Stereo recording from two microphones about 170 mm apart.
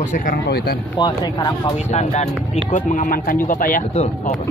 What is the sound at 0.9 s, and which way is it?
Speech, 25° left (ahead or behind).